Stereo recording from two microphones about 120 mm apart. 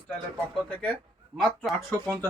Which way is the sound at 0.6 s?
10° left (ahead or behind).